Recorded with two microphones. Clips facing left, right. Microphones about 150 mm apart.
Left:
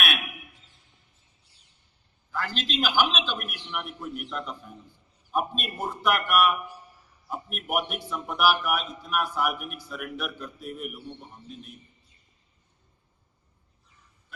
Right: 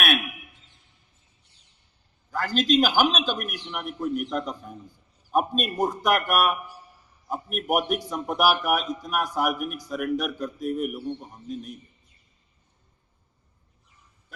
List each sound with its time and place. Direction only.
2.3 s a man's voice: 40° right (ahead or behind)